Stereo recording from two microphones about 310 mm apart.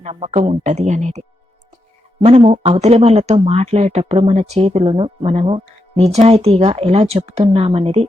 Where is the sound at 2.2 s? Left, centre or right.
Centre.